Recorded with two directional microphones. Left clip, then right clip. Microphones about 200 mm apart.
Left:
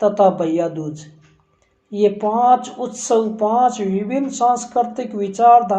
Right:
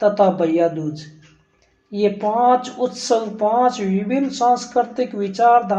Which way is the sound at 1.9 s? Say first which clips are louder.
Left 2 dB; 20° left (ahead or behind).